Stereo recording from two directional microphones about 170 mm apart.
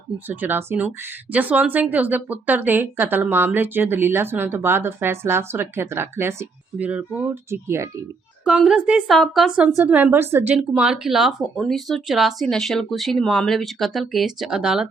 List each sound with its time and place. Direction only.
0.3 s speech: 10° right (ahead or behind)